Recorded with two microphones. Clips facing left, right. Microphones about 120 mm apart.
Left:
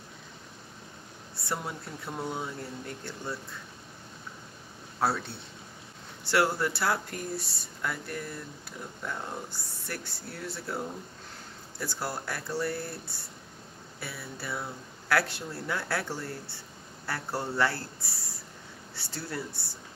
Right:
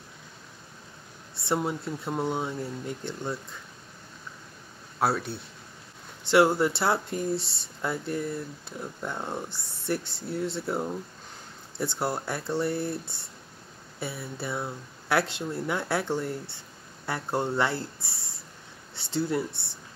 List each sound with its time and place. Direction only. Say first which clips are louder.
1.3 s speech: right 7 dB; 25° right (ahead or behind)
5.0 s speech: right 3 dB; 10° right (ahead or behind)
6.2 s speech: right 6 dB; 20° right (ahead or behind)